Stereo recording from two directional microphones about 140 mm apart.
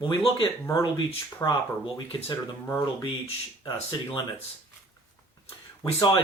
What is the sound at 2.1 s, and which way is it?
Speech, 40° left (ahead or behind).